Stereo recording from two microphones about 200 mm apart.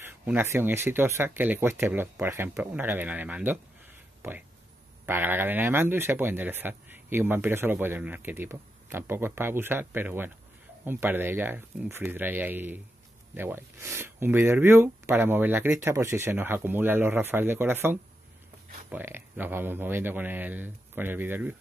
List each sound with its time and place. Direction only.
0.0 s speech: 10° right (ahead or behind)